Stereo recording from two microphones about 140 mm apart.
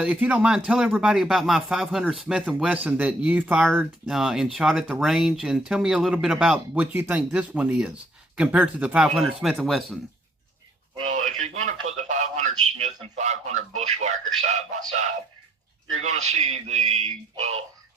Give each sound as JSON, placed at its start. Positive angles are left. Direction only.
{"t": 0.0, "sound": "speech", "side_deg": -10}
{"t": 11.0, "sound": "a man's voice", "side_deg": -60}